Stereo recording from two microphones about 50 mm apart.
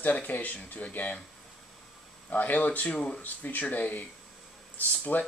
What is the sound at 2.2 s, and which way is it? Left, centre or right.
Speech, left.